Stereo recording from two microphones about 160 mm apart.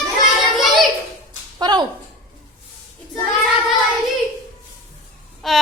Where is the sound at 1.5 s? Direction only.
25° right (ahead or behind).